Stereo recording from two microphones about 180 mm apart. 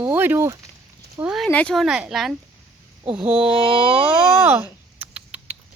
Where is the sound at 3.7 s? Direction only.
30° right (ahead or behind).